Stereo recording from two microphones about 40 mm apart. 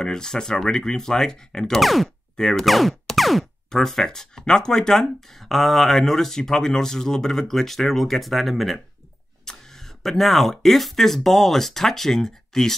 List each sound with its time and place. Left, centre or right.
0.0 s speech: centre
1.7 s a sound: centre
2.3 s boing: centre
2.6 s music: centre
3.7 s speech: centre
9.4 s speech: centre